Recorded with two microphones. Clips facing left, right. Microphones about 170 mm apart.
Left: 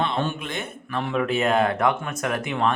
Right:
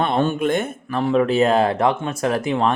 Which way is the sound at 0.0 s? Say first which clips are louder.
Right 7 dB; 45° right (ahead or behind).